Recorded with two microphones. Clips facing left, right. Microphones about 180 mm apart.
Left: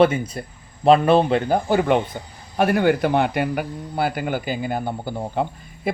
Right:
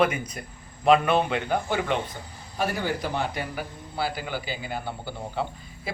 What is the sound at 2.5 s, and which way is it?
A man's voice, 60° left (ahead or behind).